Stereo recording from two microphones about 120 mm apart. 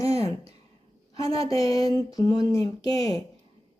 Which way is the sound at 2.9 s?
50° right (ahead or behind).